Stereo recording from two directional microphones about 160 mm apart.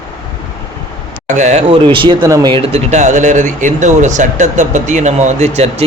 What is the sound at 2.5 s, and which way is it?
Speech, 40° right (ahead or behind).